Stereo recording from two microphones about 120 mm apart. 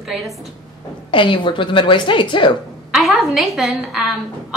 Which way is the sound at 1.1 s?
45° left (ahead or behind).